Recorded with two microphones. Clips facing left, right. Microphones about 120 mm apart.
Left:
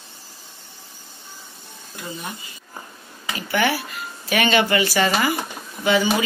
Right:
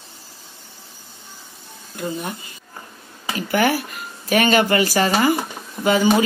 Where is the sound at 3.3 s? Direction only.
40° right (ahead or behind).